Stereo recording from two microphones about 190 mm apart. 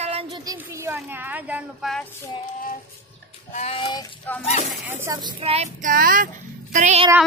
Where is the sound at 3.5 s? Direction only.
35° left (ahead or behind).